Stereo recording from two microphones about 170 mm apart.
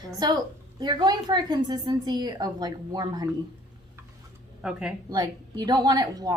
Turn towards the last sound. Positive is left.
turn(degrees=-25)  # may be behind; listen again after turning